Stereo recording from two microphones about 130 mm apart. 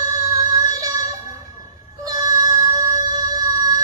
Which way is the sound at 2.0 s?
30° right (ahead or behind).